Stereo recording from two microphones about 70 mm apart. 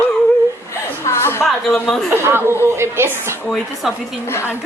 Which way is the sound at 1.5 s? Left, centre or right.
Centre.